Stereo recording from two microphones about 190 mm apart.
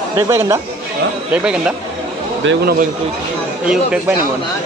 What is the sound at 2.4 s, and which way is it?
Speech, 75° right (ahead or behind).